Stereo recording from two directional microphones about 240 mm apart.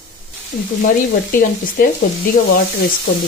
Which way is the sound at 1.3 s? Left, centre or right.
Left.